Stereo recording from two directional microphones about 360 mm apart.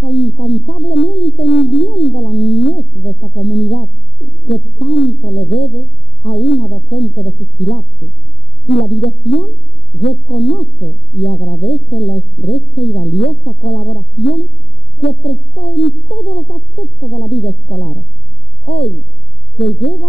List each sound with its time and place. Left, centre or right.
0.0 s speech: left